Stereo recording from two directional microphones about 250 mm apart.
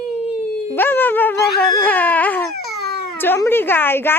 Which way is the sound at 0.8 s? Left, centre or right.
Centre.